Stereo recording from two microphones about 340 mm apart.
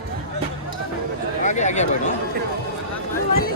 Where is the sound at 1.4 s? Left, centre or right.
Left.